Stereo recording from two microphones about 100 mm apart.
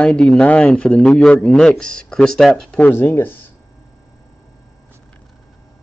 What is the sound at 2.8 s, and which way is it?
Speech, 20° left (ahead or behind).